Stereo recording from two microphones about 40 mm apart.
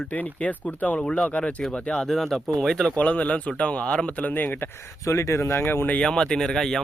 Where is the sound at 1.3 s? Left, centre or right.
Left.